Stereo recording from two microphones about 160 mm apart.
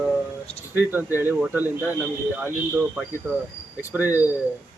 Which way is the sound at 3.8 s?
10° right (ahead or behind).